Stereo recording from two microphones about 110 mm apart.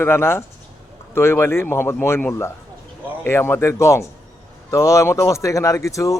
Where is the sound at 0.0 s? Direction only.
20° left (ahead or behind).